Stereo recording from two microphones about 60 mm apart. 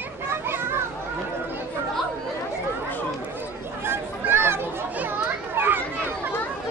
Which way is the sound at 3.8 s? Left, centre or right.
Right.